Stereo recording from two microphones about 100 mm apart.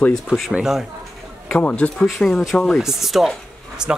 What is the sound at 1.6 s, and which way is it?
Speech, 15° left (ahead or behind).